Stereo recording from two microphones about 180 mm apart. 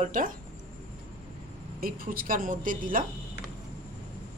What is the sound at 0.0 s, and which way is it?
Speech, 50° right (ahead or behind).